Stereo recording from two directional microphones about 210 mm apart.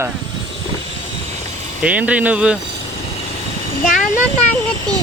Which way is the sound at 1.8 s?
5° right (ahead or behind).